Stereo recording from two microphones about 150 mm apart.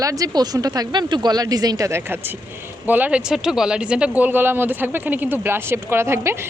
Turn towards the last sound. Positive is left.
turn(degrees=-15)  # may be behind; listen again after turning